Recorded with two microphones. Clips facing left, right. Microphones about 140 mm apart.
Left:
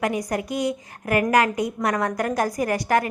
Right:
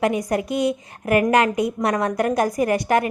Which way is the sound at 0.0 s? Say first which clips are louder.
Right 4 dB; 25° right (ahead or behind).